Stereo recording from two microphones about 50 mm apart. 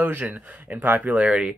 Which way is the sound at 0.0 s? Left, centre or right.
Right.